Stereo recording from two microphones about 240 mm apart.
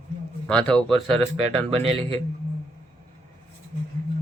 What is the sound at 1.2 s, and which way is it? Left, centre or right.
Speech, right.